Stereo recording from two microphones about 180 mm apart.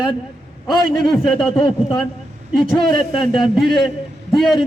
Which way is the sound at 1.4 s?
30° left (ahead or behind).